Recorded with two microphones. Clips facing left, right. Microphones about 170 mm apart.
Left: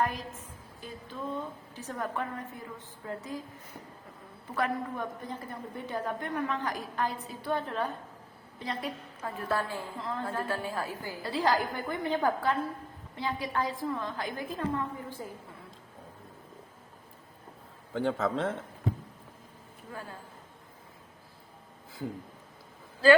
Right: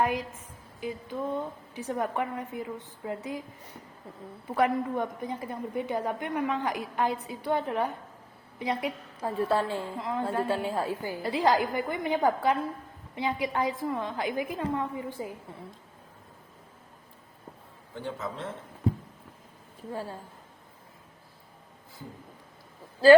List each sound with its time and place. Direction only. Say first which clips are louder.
0.0 s a woman's voice: right 4 dB; 20° right (ahead or behind)
4.5 s a woman's voice: right 6 dB; 20° right (ahead or behind)
17.9 s a man's voice: left 7 dB; 90° left
19.9 s a woman's voice: right 7 dB; 30° right (ahead or behind)